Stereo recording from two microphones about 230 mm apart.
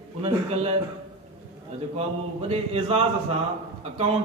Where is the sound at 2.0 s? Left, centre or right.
Right.